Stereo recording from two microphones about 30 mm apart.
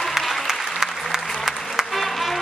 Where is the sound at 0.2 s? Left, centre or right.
Centre.